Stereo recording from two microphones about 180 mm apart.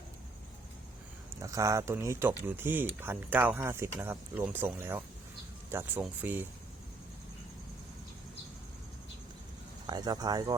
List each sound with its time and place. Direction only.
1.4 s speech: 20° right (ahead or behind)
9.8 s speech: 20° right (ahead or behind)